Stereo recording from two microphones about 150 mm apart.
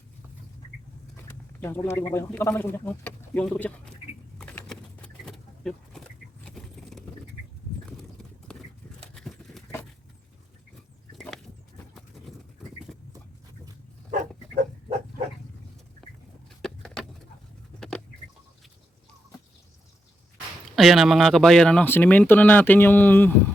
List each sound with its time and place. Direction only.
1.3 s speech: 15° left (ahead or behind)
4.4 s vehicle: 5° left (ahead or behind)
6.4 s keys jangling: 5° left (ahead or behind)
7.9 s clip-clop: 5° left (ahead or behind)
9.1 s horse: centre (ahead or behind)
11.2 s a sound: centre (ahead or behind)
12.9 s dog: centre (ahead or behind)
14.1 s pig: 65° right (ahead or behind)
16.6 s a sound: 5° left (ahead or behind)
20.7 s speech: centre (ahead or behind)